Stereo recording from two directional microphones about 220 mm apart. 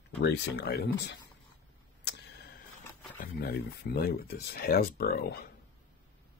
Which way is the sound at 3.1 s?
45° left (ahead or behind).